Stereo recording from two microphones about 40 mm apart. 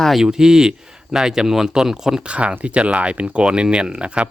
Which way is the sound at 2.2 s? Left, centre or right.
Right.